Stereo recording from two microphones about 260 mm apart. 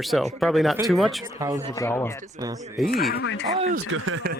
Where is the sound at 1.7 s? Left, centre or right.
Centre.